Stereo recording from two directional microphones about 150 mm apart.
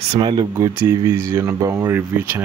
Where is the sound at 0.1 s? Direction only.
35° right (ahead or behind).